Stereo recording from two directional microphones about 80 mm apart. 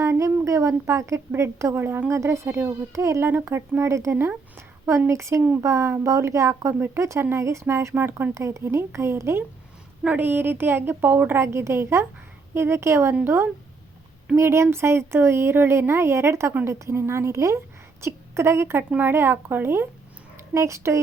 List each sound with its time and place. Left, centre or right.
0.0 s a sound: right
1.4 s speech: right
5.4 s a woman's voice: right
5.6 s a woman's voice: right